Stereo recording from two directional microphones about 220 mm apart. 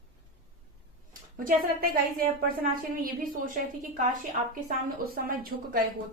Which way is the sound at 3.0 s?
40° right (ahead or behind).